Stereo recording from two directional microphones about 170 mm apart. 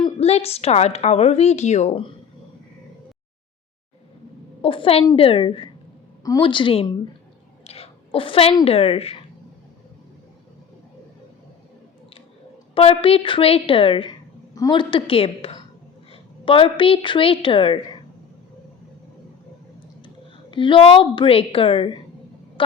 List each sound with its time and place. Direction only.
0.2 s a woman's voice: 35° left (ahead or behind)
4.6 s a woman's voice: 30° left (ahead or behind)
12.7 s a woman's voice: 35° left (ahead or behind)
20.5 s a woman's voice: 30° left (ahead or behind)